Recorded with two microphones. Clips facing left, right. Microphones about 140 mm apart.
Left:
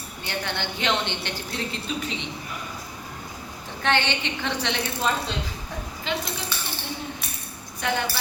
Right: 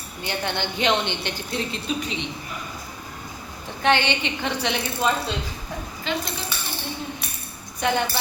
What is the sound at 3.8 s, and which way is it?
Speech, 15° right (ahead or behind).